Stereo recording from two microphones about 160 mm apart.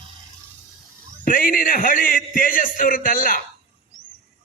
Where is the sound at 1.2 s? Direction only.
60° left (ahead or behind).